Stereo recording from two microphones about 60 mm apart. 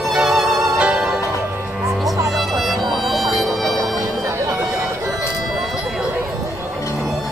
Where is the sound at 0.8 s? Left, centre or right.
Centre.